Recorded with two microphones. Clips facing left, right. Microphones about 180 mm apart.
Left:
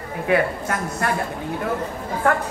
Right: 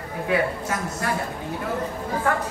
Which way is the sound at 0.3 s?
55° left (ahead or behind).